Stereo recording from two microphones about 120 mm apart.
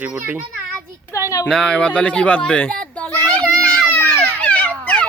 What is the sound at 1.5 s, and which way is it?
Children playing, 5° left (ahead or behind).